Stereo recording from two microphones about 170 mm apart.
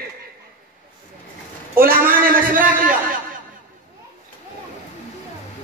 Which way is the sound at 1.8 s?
55° right (ahead or behind).